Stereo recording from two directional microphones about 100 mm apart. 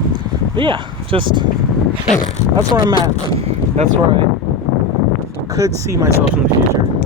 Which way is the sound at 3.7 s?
90° right.